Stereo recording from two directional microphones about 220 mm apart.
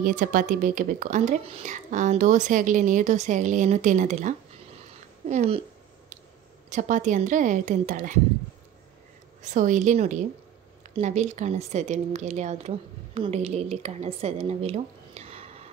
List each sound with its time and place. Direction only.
0.0 s a woman's voice: 35° right (ahead or behind)
6.7 s speech: 35° right (ahead or behind)
9.4 s a woman's voice: 35° right (ahead or behind)